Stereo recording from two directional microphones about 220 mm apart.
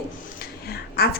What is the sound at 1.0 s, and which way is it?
Speech, 45° left (ahead or behind).